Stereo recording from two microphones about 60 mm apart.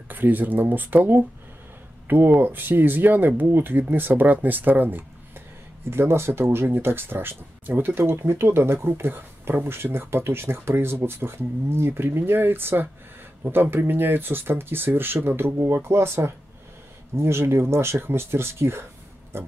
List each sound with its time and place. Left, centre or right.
0.1 s speech: right
5.9 s speech: right